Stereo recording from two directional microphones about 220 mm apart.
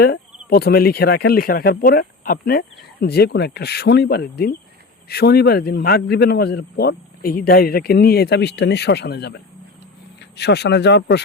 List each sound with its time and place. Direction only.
0.0 s speech: 45° left (ahead or behind)